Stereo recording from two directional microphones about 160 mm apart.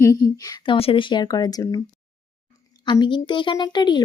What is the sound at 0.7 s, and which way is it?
Speech, 35° left (ahead or behind).